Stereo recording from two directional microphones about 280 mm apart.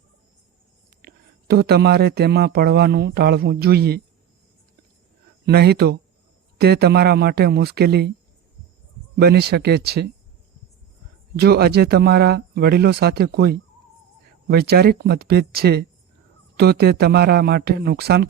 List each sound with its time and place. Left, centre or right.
1.0 s speech: right
5.5 s speech: right
9.1 s speech: right
11.3 s speech: right